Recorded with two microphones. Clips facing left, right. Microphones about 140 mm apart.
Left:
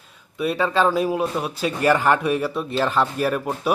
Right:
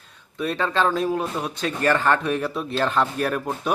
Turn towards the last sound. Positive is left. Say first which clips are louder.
# left 2 dB
turn(degrees=5)  # may be behind; listen again after turning